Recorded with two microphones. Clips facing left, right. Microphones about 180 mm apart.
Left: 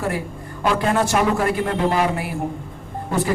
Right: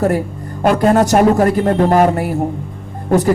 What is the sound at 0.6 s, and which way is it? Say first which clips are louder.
A man's voice: right 7 dB; 45° right (ahead or behind).